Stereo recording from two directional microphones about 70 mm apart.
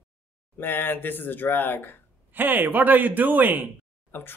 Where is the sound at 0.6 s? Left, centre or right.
Left.